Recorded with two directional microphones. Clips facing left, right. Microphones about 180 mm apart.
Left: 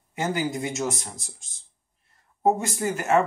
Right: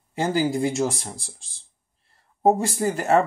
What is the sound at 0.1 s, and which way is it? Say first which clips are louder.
Speech: right 4 dB; 30° right (ahead or behind).